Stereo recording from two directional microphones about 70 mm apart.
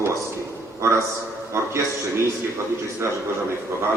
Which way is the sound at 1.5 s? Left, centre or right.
Right.